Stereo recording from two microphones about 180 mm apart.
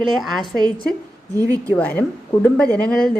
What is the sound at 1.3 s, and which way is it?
Speech, 20° right (ahead or behind).